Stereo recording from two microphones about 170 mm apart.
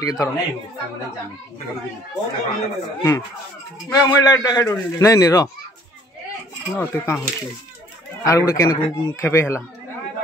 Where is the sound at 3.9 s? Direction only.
20° left (ahead or behind).